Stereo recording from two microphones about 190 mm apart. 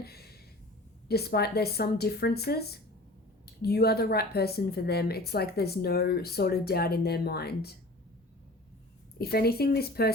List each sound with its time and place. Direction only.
0.0 s a sound: 55° left (ahead or behind)
1.0 s a woman's voice: 55° left (ahead or behind)
9.1 s a woman's voice: 55° left (ahead or behind)